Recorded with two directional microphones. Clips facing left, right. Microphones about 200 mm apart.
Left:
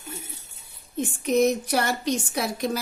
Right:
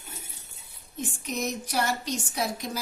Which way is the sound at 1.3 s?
60° left (ahead or behind).